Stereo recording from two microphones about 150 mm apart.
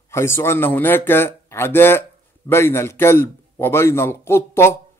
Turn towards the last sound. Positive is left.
turn(degrees=15)  # may be behind; listen again after turning